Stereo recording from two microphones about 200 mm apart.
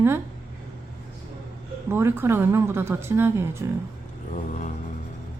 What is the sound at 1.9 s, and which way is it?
Speech, 10° right (ahead or behind).